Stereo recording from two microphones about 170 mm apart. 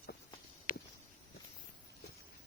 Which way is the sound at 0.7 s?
50° left (ahead or behind).